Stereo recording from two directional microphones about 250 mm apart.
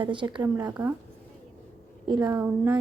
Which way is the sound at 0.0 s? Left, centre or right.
Centre.